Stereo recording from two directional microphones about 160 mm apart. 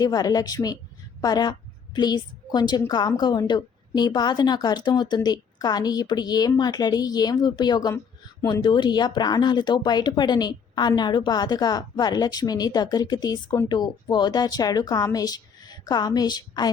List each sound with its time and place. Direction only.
0.0 s speech: 25° left (ahead or behind)